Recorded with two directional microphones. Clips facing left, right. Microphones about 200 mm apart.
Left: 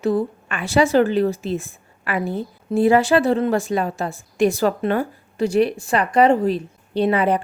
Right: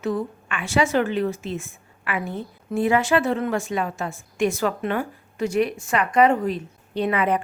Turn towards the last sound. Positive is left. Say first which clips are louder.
# left 4 dB
turn(degrees=30)  # may be behind; listen again after turning